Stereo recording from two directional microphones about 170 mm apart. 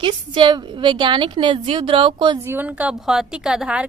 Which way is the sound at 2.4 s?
10° right (ahead or behind).